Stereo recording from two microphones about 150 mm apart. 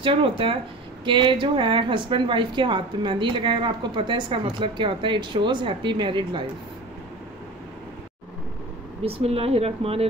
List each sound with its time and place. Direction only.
0.0 s a woman's voice: 35° right (ahead or behind)
9.0 s a woman's voice: 40° right (ahead or behind)